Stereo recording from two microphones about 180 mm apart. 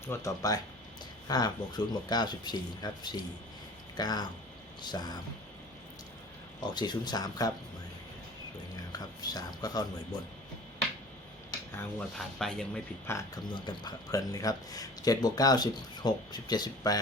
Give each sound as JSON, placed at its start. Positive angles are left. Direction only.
{"t": 0.1, "sound": "speech", "side_deg": 20}
{"t": 6.7, "sound": "speech", "side_deg": 25}
{"t": 8.7, "sound": "speech", "side_deg": 20}
{"t": 11.8, "sound": "speech", "side_deg": 5}
{"t": 13.1, "sound": "speech", "side_deg": 20}